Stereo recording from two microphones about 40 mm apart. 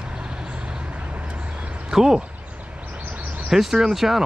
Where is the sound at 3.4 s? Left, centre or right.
Centre.